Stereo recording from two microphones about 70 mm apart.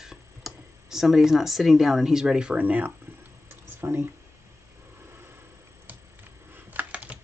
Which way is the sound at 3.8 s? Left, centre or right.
Right.